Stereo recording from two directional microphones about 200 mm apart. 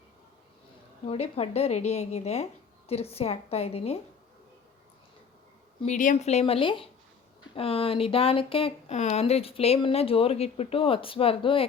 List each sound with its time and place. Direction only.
1.0 s speech: 30° left (ahead or behind)
5.8 s speech: 40° left (ahead or behind)